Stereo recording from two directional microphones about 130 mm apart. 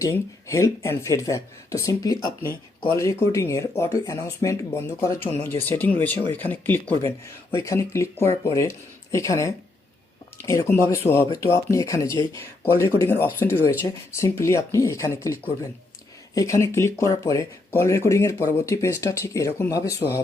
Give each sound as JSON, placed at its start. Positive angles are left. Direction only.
{"t": 0.0, "sound": "speech", "side_deg": 25}